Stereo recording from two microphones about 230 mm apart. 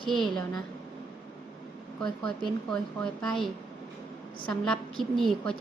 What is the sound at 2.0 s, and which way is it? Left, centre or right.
A woman's voice, centre.